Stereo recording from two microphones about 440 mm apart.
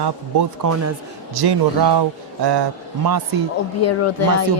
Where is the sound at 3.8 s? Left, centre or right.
Left.